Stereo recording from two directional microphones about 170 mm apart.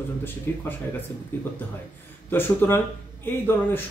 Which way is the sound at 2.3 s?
10° left (ahead or behind).